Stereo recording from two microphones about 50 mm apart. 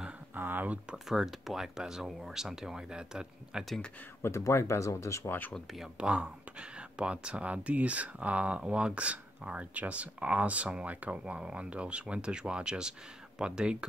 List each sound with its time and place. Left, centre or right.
0.3 s a sound: right
0.9 s speech: centre
4.3 s speech: left
5.9 s speech: right